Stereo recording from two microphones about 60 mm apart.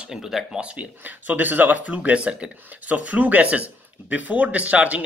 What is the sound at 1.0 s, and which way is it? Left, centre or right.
Speech, right.